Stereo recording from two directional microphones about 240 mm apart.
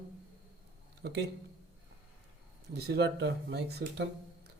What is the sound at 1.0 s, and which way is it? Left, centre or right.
Speech, right.